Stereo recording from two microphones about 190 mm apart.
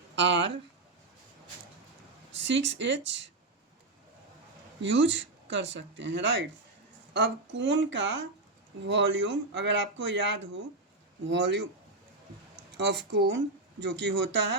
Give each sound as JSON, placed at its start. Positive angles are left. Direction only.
{"t": 0.2, "sound": "speech", "side_deg": -70}
{"t": 2.3, "sound": "speech", "side_deg": -70}
{"t": 4.8, "sound": "speech", "side_deg": -70}
{"t": 12.7, "sound": "speech", "side_deg": -65}